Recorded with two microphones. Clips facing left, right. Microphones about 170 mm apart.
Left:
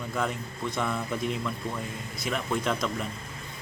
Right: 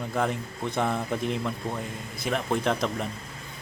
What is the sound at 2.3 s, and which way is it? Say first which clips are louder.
Speech: right 3 dB; 45° right (ahead or behind).